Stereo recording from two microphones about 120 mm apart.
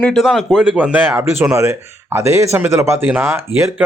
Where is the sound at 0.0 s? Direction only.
Centre (ahead or behind); by 3.7 s 20° right (ahead or behind).